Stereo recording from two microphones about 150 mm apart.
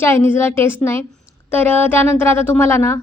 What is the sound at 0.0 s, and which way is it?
A woman's voice, 15° left (ahead or behind).